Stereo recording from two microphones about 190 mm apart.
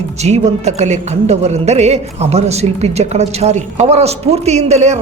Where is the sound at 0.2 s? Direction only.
35° right (ahead or behind).